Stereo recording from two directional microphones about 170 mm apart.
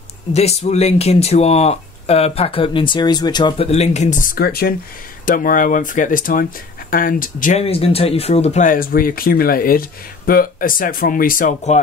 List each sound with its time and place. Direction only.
0.3 s speech: 40° left (ahead or behind)
7.6 s speech: 35° left (ahead or behind)